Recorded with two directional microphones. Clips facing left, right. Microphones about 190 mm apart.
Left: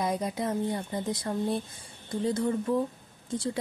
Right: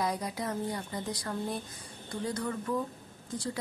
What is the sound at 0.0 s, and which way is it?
Speech, 20° left (ahead or behind).